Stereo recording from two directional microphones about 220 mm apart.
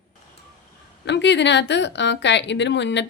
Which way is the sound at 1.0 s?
55° left (ahead or behind).